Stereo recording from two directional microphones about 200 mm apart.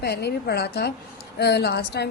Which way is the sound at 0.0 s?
55° left (ahead or behind).